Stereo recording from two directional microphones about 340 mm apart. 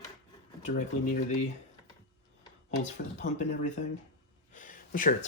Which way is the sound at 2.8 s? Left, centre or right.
Left.